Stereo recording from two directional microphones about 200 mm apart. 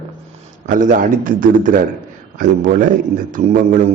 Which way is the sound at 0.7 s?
40° right (ahead or behind).